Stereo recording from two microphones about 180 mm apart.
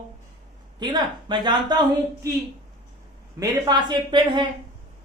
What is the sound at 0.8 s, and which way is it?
Speech, 25° right (ahead or behind).